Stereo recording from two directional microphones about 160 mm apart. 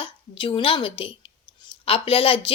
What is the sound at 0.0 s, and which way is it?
A woman's voice, 35° left (ahead or behind).